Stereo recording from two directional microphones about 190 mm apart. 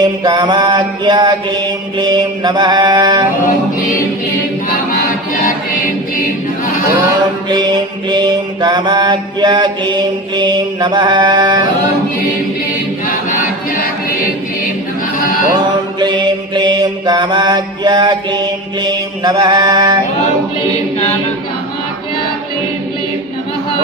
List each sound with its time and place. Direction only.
0.0 s mantra: 20° right (ahead or behind)
7.5 s mantra: 25° right (ahead or behind)
16.0 s mantra: 25° right (ahead or behind)